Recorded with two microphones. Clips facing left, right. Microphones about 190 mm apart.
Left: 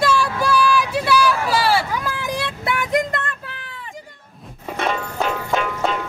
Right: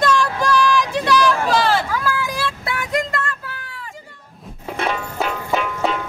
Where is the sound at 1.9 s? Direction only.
20° left (ahead or behind).